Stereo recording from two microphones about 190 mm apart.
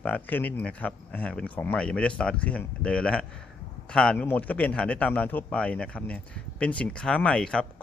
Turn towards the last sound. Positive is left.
turn(degrees=5)  # may be behind; listen again after turning